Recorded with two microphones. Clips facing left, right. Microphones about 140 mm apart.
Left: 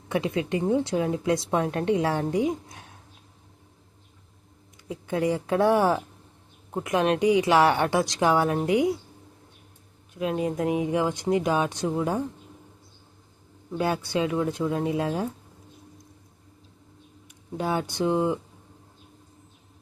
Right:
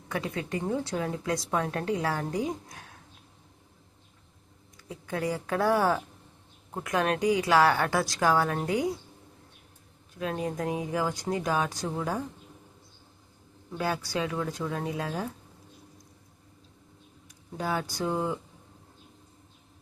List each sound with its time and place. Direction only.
0.1 s a woman's voice: 25° left (ahead or behind)
4.9 s a woman's voice: 25° left (ahead or behind)
10.2 s a woman's voice: 20° left (ahead or behind)
13.7 s a woman's voice: 25° left (ahead or behind)
17.6 s a woman's voice: 25° left (ahead or behind)